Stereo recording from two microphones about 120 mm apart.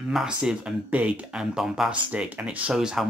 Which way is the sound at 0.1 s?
5° right (ahead or behind).